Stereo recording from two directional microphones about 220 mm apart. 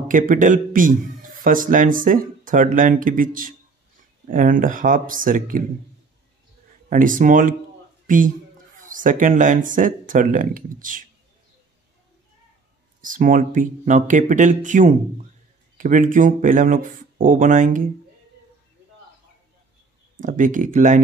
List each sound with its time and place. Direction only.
0.1 s a man's voice: 35° right (ahead or behind)
6.9 s a man's voice: 35° right (ahead or behind)
8.7 s a man's voice: 35° right (ahead or behind)
13.0 s a man's voice: 35° right (ahead or behind)
20.2 s a man's voice: 35° right (ahead or behind)